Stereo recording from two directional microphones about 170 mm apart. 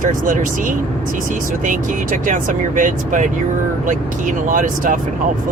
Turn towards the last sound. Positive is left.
turn(degrees=-50)  # may be behind; listen again after turning